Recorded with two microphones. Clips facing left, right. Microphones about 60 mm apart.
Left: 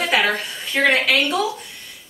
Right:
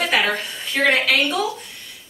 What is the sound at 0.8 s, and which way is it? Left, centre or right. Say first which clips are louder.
Speech: left 1 dB; centre.